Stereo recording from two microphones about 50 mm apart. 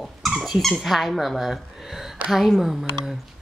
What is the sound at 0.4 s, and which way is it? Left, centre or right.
Speech, centre.